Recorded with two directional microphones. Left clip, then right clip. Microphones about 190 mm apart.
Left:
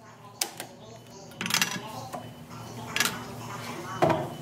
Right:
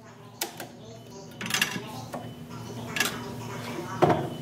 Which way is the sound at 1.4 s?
20° left (ahead or behind).